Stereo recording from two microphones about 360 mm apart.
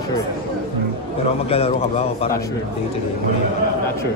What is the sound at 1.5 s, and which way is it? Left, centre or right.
Speech, centre.